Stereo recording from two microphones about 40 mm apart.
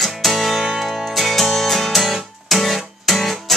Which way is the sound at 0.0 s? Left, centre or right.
Centre.